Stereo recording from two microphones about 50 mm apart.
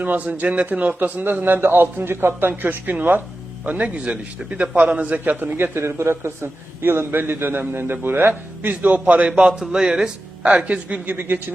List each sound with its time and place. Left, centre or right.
0.0 s a man's voice: right
0.9 s a man's voice: right
3.7 s a man's voice: right
5.4 s a man's voice: right
5.7 s a man's voice: right
8.6 s a man's voice: right
9.5 s speech: centre
10.6 s a man's voice: right
11.1 s a man's voice: right